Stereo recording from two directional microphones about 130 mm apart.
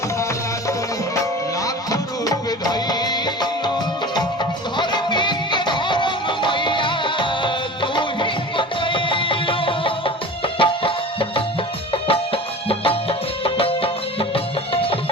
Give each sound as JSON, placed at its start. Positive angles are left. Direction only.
{"t": 1.6, "sound": "music", "side_deg": 25}
{"t": 4.8, "sound": "music", "side_deg": 35}